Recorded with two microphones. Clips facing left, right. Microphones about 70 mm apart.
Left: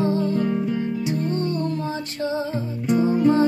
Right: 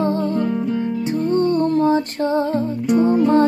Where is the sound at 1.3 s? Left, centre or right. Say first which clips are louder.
Right 8 dB; right.